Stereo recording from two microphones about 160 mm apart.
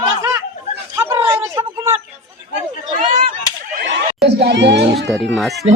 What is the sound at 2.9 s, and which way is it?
Whip, 60° right (ahead or behind).